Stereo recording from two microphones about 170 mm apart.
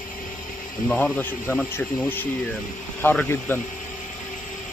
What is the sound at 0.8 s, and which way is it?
Speech, 5° left (ahead or behind).